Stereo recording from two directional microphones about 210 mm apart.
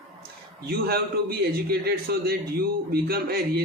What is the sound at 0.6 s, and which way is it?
A man's voice, 45° right (ahead or behind).